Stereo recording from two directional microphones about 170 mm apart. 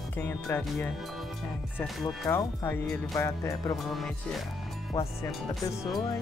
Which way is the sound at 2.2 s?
15° left (ahead or behind).